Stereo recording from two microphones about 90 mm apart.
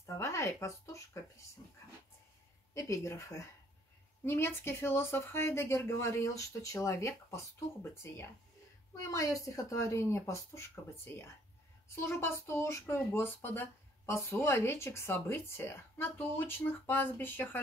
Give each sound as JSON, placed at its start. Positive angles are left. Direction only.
{"t": 0.0, "sound": "speech", "side_deg": 35}
{"t": 2.7, "sound": "speech", "side_deg": 40}
{"t": 11.9, "sound": "speech", "side_deg": 30}